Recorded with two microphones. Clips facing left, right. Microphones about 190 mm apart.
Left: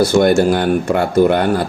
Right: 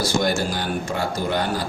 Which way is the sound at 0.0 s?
60° left (ahead or behind).